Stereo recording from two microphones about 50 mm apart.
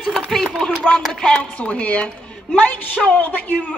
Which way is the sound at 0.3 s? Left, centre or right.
Centre.